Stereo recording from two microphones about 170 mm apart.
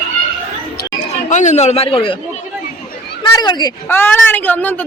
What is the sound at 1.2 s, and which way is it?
Speech, 45° left (ahead or behind).